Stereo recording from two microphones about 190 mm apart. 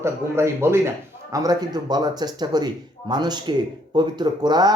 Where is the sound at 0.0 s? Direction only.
15° right (ahead or behind).